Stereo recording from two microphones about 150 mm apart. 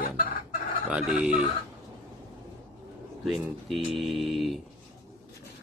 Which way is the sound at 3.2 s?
Centre (ahead or behind).